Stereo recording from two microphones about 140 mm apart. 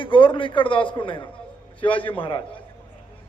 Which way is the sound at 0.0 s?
40° left (ahead or behind).